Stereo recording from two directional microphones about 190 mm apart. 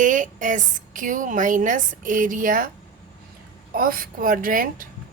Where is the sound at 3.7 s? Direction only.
50° right (ahead or behind).